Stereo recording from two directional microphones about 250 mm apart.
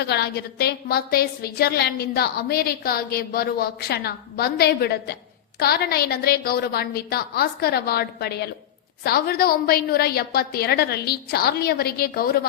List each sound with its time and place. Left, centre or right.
0.0 s a woman's voice: left